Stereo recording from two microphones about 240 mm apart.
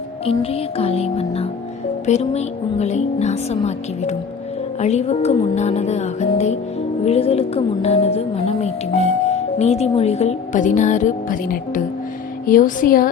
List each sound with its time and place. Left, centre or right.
0.3 s a woman's voice: left